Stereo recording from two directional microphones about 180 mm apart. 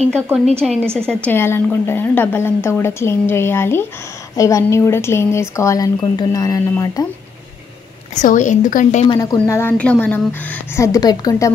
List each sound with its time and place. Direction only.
0.6 s a woman's voice: centre (ahead or behind); by 7.1 s 20° left (ahead or behind)
8.1 s a woman's voice: 45° left (ahead or behind)
9.0 s speech: 25° left (ahead or behind)